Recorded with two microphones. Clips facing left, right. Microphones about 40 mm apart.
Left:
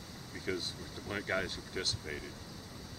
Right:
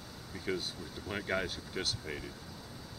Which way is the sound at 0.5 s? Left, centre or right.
Centre.